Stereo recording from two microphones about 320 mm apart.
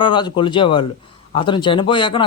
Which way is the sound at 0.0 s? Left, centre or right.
Centre.